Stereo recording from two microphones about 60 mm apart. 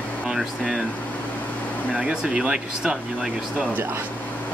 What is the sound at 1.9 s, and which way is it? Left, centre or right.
Speech, centre.